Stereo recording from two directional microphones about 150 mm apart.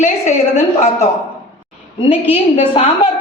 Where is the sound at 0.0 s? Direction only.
55° left (ahead or behind).